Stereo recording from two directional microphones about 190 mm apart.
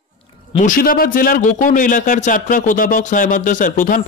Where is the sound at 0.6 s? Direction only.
45° left (ahead or behind).